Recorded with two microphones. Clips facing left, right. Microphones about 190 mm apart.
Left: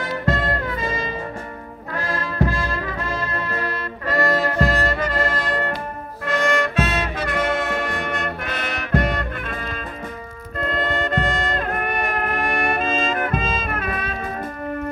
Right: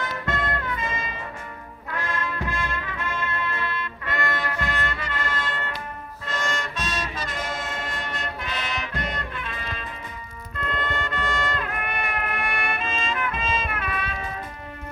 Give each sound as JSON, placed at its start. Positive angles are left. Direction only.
{"t": 0.0, "sound": "music", "side_deg": 35}
{"t": 6.2, "sound": "music", "side_deg": 60}